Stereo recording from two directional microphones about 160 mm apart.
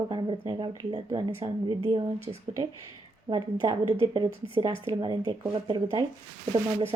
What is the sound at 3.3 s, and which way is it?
Speech, 30° right (ahead or behind).